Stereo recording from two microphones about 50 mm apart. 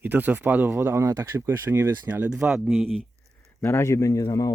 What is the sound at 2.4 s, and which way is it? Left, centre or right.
Speech, centre.